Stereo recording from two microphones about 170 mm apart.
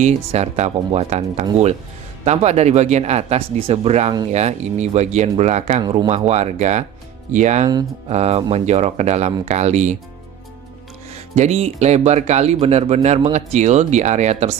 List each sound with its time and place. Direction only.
0.0 s speech: 40° right (ahead or behind)
11.1 s speech: 40° right (ahead or behind)